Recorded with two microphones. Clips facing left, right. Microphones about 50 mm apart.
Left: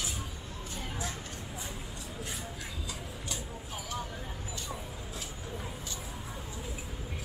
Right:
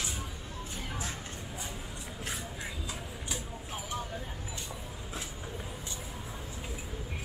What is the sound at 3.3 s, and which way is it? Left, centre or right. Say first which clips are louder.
Vehicle: right 1 dB; centre.